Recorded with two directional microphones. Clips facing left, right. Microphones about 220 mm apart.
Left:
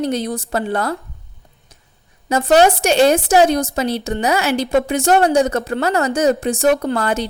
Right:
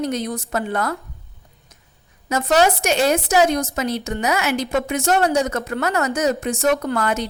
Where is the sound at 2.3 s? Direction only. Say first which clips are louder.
Left 4 dB; 30° left (ahead or behind).